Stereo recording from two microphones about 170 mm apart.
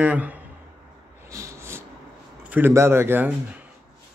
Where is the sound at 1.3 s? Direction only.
15° right (ahead or behind).